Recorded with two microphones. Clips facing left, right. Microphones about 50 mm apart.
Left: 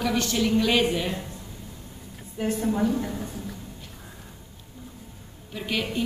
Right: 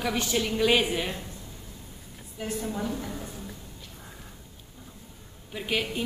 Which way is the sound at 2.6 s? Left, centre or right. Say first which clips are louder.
Left 10 dB; centre.